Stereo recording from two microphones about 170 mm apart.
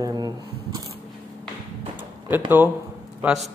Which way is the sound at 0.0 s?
25° right (ahead or behind).